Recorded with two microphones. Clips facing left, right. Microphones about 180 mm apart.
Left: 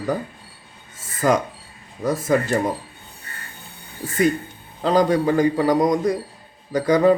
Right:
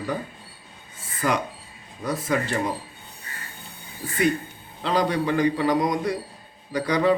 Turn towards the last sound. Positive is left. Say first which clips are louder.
# left 5 dB
turn(degrees=45)  # may be behind; listen again after turning